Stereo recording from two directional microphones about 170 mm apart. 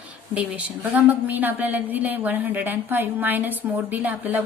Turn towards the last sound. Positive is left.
turn(degrees=-10)  # may be behind; listen again after turning